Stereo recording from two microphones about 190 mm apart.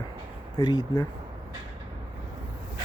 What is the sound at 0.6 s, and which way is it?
Speech, 20° left (ahead or behind).